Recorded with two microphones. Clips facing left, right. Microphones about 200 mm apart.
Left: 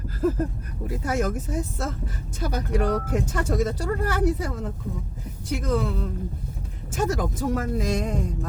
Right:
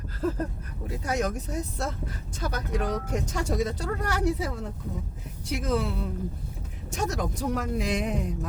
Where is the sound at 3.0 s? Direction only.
5° left (ahead or behind).